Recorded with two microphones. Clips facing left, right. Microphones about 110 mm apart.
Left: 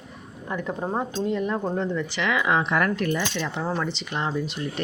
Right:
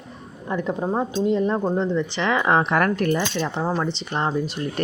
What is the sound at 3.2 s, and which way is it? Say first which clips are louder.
Speech: right 4 dB; 35° right (ahead or behind).